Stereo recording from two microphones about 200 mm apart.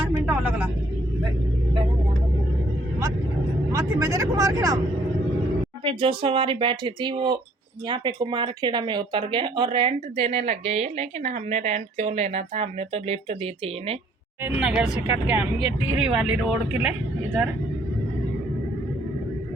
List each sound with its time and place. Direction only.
0.1 s speech: 5° right (ahead or behind)
3.7 s speech: 15° right (ahead or behind)
5.8 s a woman's voice: 25° right (ahead or behind)
14.4 s speech: 5° right (ahead or behind)